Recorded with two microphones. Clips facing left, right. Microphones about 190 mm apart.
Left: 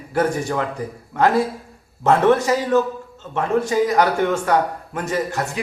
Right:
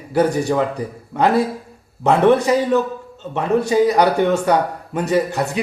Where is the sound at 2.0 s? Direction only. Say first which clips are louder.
Right 2 dB; 15° right (ahead or behind).